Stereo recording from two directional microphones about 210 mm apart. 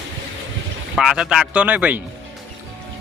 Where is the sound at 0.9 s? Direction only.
5° right (ahead or behind).